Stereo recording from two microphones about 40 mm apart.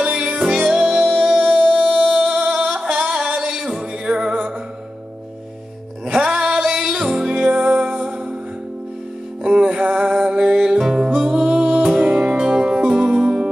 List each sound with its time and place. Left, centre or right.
0.0 s music: right
6.1 s music: centre
9.4 s music: right